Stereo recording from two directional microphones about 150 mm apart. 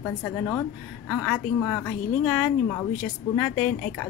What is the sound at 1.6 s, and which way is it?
Speech, 10° left (ahead or behind).